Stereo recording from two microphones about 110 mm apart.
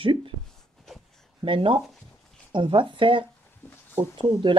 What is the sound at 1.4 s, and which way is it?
Speech, 50° right (ahead or behind).